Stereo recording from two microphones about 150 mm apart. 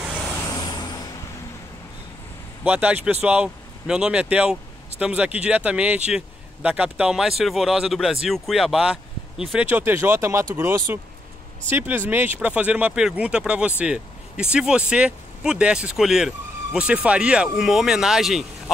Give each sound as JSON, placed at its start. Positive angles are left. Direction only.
{"t": 0.6, "sound": "vehicle", "side_deg": 30}
{"t": 2.6, "sound": "speech", "side_deg": -10}